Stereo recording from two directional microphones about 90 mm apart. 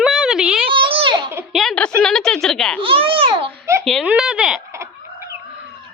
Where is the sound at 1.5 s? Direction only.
Centre (ahead or behind).